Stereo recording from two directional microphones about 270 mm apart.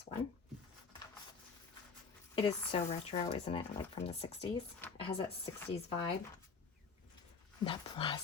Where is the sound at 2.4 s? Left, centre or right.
Centre.